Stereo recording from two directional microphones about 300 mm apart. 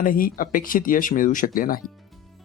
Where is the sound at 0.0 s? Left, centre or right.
Left.